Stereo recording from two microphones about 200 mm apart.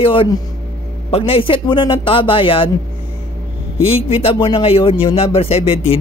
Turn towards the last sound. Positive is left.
turn(degrees=30)  # may be behind; listen again after turning